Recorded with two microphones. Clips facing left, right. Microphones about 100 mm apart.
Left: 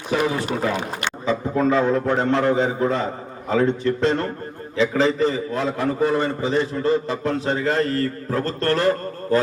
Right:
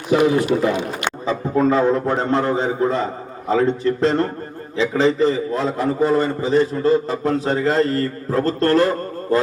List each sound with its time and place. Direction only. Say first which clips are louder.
0.2 s a man's voice: right 7 dB; 35° left (ahead or behind)
1.3 s a man's voice: right 2 dB; 35° right (ahead or behind)